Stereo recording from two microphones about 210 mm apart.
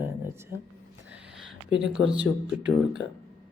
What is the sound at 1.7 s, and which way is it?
Speech, 60° right (ahead or behind).